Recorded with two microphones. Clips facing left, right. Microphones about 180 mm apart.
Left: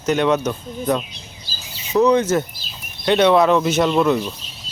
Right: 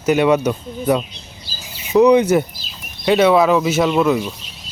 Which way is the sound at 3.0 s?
5° right (ahead or behind).